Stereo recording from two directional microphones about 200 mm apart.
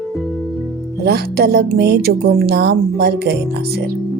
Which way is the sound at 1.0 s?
55° right (ahead or behind).